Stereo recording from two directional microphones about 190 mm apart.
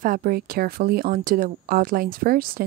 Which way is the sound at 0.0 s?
50° right (ahead or behind).